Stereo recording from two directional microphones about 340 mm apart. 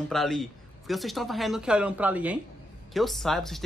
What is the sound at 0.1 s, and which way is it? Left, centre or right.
Speech, centre.